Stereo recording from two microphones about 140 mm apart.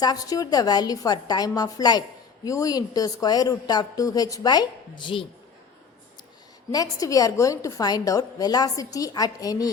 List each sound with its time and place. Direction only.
0.0 s a woman's voice: 25° left (ahead or behind)
6.7 s a woman's voice: 25° left (ahead or behind)